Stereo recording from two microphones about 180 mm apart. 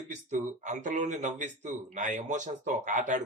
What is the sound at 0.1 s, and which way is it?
Speech, 40° right (ahead or behind).